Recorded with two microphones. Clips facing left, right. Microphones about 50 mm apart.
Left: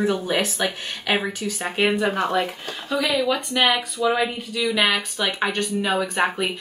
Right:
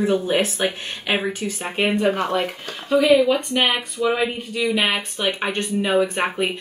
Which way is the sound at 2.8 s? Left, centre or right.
Right.